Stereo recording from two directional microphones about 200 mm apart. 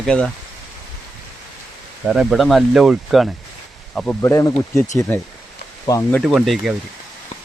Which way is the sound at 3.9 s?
10° left (ahead or behind).